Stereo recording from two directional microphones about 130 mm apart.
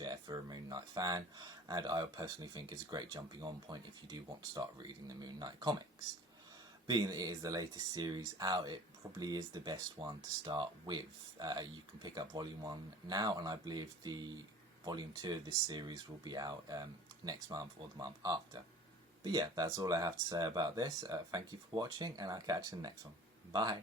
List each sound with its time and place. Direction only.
0.0 s speech: 30° right (ahead or behind)
6.8 s speech: 30° right (ahead or behind)